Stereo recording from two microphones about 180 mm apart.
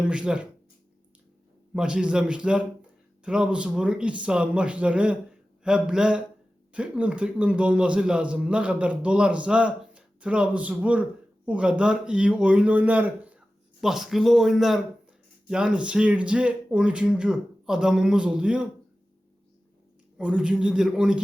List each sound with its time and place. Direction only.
0.0 s speech: 5° right (ahead or behind)
1.7 s a man's voice: 5° right (ahead or behind)
20.1 s speech: 5° right (ahead or behind)